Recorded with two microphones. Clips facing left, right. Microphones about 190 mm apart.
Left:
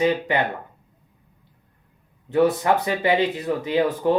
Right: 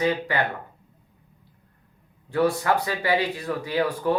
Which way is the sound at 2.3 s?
20° left (ahead or behind).